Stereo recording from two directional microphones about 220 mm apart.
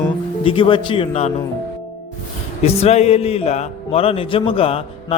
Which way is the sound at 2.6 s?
30° left (ahead or behind).